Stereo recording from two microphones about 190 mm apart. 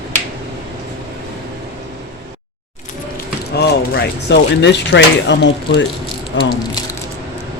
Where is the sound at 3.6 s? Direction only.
60° left (ahead or behind).